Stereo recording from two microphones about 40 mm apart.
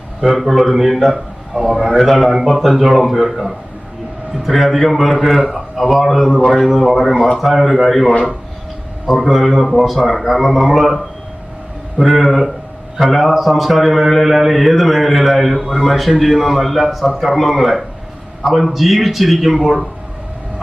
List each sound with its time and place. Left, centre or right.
0.2 s a man's voice: centre
1.1 s speech: centre
1.7 s a man's voice: centre